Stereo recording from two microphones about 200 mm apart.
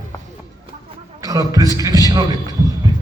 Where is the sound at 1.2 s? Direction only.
15° right (ahead or behind).